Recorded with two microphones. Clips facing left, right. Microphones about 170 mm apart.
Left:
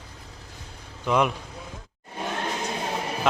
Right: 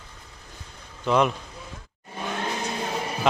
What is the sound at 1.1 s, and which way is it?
Speech, 10° left (ahead or behind).